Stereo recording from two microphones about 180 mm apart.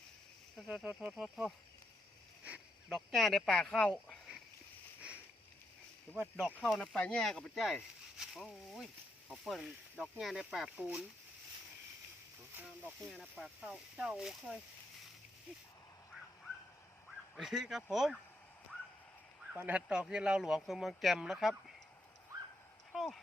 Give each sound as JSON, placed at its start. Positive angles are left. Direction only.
{"t": 0.5, "sound": "speech", "side_deg": 0}
{"t": 6.1, "sound": "speech", "side_deg": 0}
{"t": 12.5, "sound": "speech", "side_deg": -10}
{"t": 17.1, "sound": "duck", "side_deg": 0}
{"t": 17.9, "sound": "speech", "side_deg": 0}
{"t": 19.5, "sound": "speech", "side_deg": -10}
{"t": 22.9, "sound": "speech", "side_deg": 0}